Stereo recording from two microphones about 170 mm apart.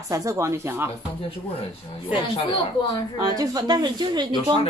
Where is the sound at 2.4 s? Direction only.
30° left (ahead or behind).